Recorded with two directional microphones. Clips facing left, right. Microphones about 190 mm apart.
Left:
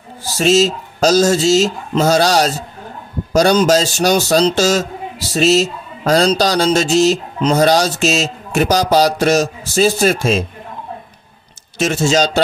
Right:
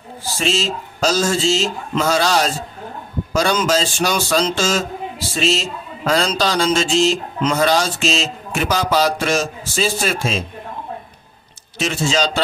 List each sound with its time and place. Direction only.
0.4 s a man's voice: 40° left (ahead or behind)
11.8 s speech: 45° left (ahead or behind)